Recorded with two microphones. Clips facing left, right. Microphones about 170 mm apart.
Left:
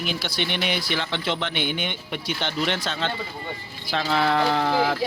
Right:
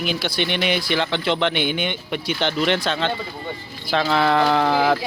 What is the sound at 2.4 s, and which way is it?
Speech, 80° right.